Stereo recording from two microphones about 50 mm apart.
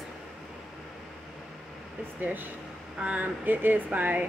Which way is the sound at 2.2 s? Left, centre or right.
Right.